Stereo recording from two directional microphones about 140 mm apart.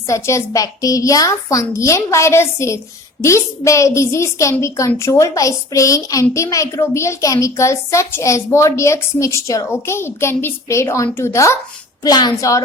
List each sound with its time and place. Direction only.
0.1 s a child's voice: 20° left (ahead or behind)